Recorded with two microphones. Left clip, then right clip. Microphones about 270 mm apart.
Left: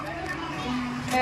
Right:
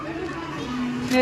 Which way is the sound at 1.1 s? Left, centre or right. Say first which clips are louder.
Right 4 dB; centre.